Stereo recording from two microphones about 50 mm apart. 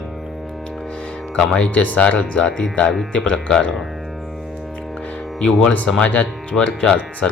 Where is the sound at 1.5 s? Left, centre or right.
Left.